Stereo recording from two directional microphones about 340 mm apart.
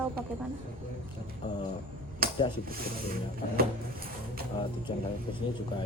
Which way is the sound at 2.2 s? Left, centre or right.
Right.